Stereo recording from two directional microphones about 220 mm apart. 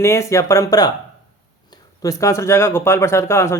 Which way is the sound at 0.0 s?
10° left (ahead or behind).